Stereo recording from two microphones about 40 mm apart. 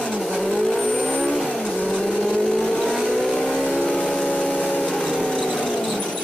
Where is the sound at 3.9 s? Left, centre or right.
Left.